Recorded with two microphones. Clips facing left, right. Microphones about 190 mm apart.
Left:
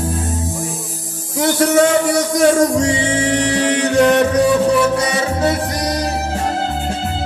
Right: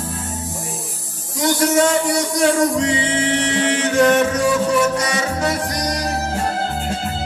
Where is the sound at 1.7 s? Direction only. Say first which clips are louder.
Left 3 dB; 50° left (ahead or behind); by 5.5 s 30° left (ahead or behind).